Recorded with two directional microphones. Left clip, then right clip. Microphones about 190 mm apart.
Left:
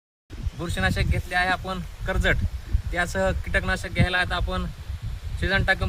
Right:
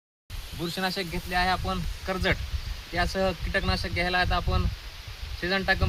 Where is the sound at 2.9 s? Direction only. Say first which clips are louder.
Left 2 dB; 5° left (ahead or behind).